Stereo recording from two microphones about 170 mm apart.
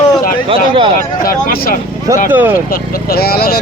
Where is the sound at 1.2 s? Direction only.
55° left (ahead or behind).